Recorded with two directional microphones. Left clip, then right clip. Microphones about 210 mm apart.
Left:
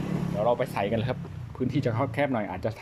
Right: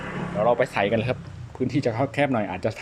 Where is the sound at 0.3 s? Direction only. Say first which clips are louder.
Right 5 dB; centre (ahead or behind).